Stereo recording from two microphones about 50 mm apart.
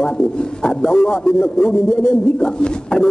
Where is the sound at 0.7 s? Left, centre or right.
Centre.